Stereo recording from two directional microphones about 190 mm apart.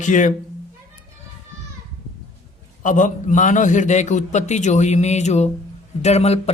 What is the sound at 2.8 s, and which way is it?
Speech, 40° left (ahead or behind).